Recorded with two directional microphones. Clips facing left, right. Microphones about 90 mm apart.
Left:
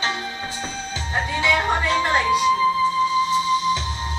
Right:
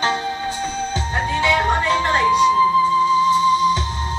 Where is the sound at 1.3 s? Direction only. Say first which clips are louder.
Right 3 dB; centre (ahead or behind).